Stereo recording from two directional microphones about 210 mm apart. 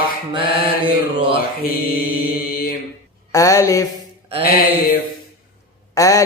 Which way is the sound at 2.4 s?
45° left (ahead or behind).